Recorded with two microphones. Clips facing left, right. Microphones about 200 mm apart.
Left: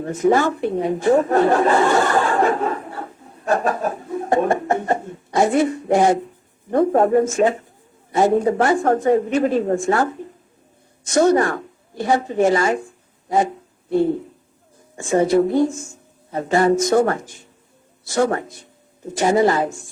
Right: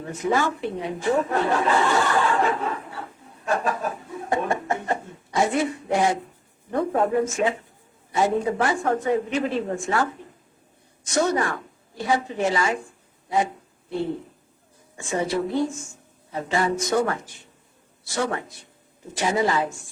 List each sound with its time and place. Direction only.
0.0 s a woman's voice: 45° left (ahead or behind)
14.9 s speech: 45° left (ahead or behind)